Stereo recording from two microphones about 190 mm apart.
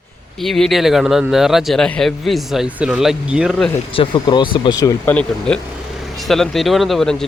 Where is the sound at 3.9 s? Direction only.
25° left (ahead or behind).